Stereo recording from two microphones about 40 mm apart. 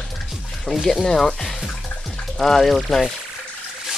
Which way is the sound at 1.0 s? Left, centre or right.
Centre.